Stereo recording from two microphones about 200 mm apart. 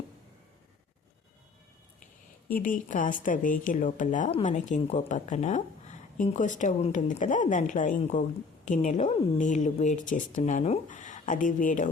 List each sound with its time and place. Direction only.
2.6 s a woman's voice: 40° left (ahead or behind)